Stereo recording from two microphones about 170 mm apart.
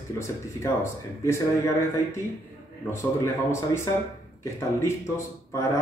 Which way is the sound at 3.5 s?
15° left (ahead or behind).